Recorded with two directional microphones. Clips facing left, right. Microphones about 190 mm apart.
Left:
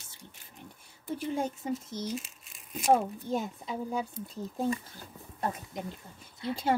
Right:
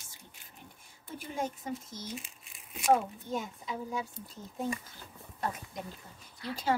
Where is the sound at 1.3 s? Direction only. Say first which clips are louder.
Left 2 dB; 35° left (ahead or behind).